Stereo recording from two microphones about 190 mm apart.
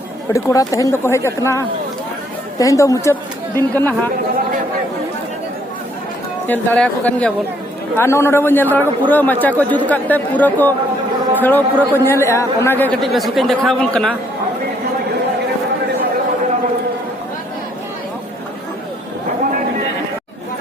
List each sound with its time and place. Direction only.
0.3 s speech: 15° left (ahead or behind)
6.5 s speech: 10° left (ahead or behind)